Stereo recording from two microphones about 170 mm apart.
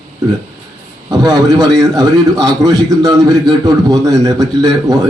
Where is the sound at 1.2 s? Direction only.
20° right (ahead or behind).